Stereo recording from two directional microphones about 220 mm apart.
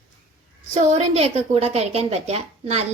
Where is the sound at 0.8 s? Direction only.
30° right (ahead or behind).